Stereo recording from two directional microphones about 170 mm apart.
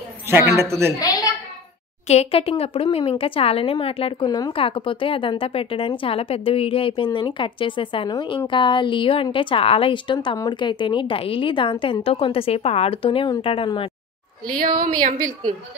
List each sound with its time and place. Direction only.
0.3 s speech: 15° right (ahead or behind)
2.0 s speech: 35° left (ahead or behind)
14.5 s a woman's voice: 55° right (ahead or behind)